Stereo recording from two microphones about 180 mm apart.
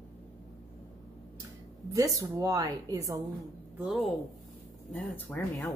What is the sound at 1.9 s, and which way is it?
A woman's voice, 20° right (ahead or behind).